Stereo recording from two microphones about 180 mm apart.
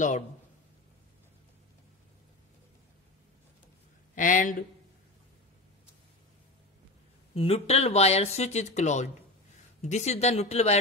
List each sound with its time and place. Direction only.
4.1 s speech: 45° left (ahead or behind)
7.3 s speech: 35° left (ahead or behind)